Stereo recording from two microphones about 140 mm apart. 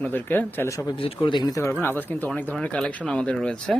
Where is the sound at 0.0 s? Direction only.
15° left (ahead or behind).